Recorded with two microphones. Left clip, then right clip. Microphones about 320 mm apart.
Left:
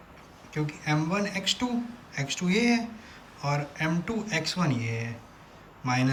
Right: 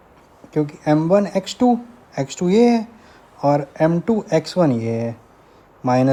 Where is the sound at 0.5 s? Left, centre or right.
Centre.